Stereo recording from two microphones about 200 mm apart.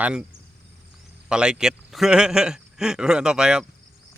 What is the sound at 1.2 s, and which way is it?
Speech, 5° right (ahead or behind).